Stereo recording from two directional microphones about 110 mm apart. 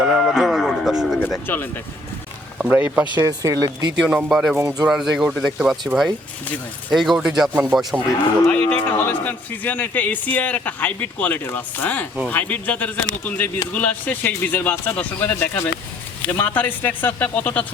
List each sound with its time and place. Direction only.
0.0 s music: centre (ahead or behind)
1.5 s speech: 20° left (ahead or behind)
2.6 s speech: 15° right (ahead or behind)
3.2 s speech: 30° right (ahead or behind)
4.0 s speech: 15° right (ahead or behind)
4.3 s speech: 5° right (ahead or behind)
4.5 s speech: 20° right (ahead or behind)
4.9 s speech: 5° right (ahead or behind)
5.9 s speech: 15° right (ahead or behind)
6.9 s speech: centre (ahead or behind)
7.5 s speech: 15° right (ahead or behind)
8.4 s speech: 15° left (ahead or behind)